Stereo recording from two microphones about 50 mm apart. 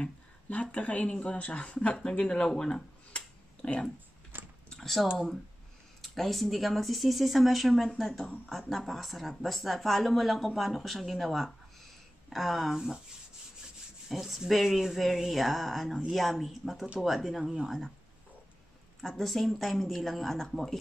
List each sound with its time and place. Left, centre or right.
0.5 s speech: left
4.6 s typing: centre
5.9 s speech: centre
14.0 s speech: centre
18.9 s speech: centre